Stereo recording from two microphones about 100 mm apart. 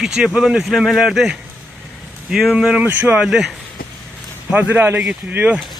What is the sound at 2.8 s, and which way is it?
Speech, 20° right (ahead or behind).